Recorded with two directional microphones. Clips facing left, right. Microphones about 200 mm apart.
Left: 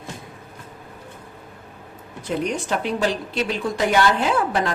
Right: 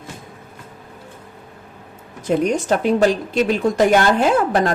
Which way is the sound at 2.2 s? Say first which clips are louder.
Right 7 dB; 45° right (ahead or behind).